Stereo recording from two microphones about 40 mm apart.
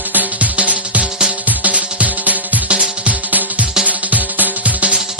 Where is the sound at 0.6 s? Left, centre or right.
Right.